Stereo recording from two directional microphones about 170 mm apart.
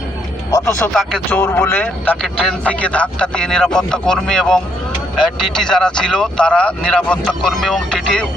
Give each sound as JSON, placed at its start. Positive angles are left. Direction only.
{"t": 0.5, "sound": "speech", "side_deg": 15}